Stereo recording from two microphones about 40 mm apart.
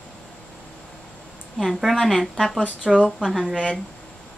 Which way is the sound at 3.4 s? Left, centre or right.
Right.